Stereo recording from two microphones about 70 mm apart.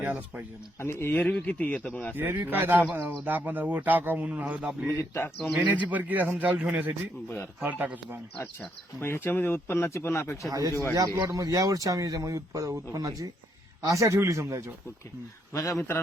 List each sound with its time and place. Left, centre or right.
0.0 s speech: right
0.8 s speech: left
1.1 s speech: centre
2.1 s speech: right
9.0 s speech: left
10.5 s speech: right
15.5 s a man's voice: left